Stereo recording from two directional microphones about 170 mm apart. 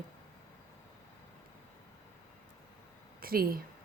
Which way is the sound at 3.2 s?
60° right (ahead or behind).